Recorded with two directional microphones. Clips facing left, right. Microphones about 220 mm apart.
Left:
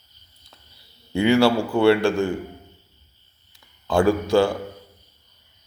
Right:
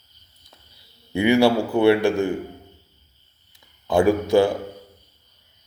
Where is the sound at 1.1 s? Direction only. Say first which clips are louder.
Even; 20° right (ahead or behind).